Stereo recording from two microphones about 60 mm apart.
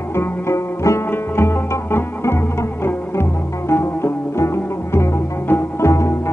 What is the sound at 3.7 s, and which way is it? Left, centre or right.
Music, left.